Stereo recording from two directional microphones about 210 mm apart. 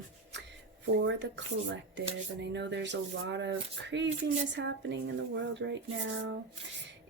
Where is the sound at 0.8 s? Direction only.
60° right (ahead or behind).